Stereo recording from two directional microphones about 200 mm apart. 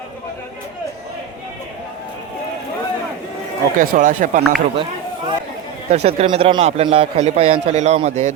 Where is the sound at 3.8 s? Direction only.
40° right (ahead or behind).